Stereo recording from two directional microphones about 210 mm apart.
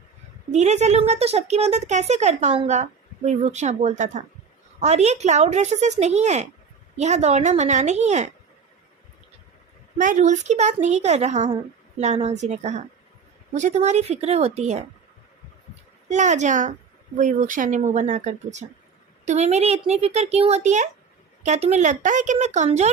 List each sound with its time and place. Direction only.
0.5 s a woman's voice: 35° right (ahead or behind)
10.0 s a woman's voice: 35° right (ahead or behind)
16.0 s a woman's voice: 35° right (ahead or behind)